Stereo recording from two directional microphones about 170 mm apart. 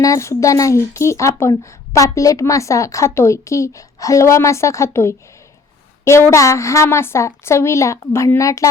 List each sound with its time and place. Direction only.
0.0 s speech: 20° left (ahead or behind)